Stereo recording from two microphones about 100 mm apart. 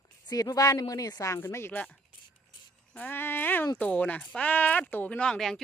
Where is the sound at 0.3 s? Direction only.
40° left (ahead or behind).